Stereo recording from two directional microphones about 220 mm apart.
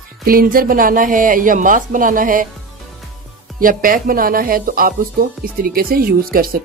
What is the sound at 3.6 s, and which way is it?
A woman's voice, 40° right (ahead or behind).